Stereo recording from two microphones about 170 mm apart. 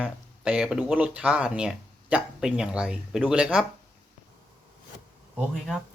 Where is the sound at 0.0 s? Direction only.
5° right (ahead or behind).